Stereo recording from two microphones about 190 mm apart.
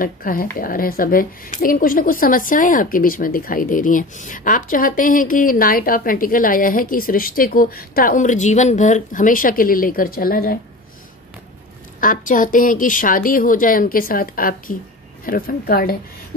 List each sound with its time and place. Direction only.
0.0 s a woman's voice: 50° left (ahead or behind)
12.0 s a woman's voice: 45° left (ahead or behind)